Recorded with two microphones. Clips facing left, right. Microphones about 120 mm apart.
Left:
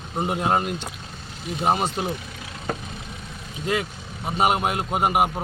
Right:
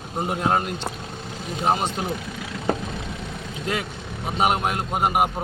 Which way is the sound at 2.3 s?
75° right (ahead or behind).